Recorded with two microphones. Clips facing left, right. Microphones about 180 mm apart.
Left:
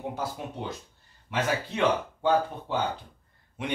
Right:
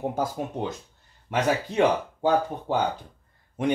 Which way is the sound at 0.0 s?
50° right (ahead or behind).